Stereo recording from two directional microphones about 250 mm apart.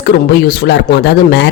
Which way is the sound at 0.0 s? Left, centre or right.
Left.